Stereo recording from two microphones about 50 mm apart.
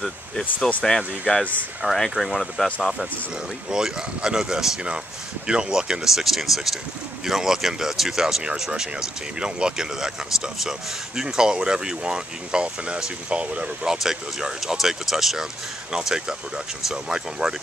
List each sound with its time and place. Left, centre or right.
0.0 s speech: centre
1.3 s speech: left
1.8 s speech: centre
3.7 s speech: centre
13.8 s speech: centre